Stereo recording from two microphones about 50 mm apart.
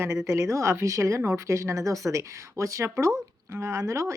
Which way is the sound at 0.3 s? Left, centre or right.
Right.